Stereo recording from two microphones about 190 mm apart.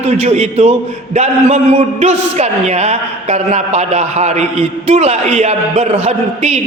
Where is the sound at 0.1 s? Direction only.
35° right (ahead or behind).